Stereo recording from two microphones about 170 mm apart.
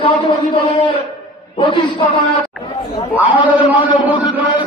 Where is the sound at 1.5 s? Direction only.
30° left (ahead or behind).